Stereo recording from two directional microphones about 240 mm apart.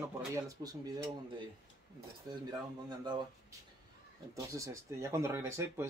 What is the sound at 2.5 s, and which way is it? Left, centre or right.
Speech, centre.